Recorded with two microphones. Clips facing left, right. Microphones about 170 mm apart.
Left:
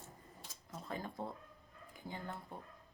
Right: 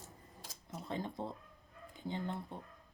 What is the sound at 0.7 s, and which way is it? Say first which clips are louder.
Speech: right 3 dB; 20° right (ahead or behind).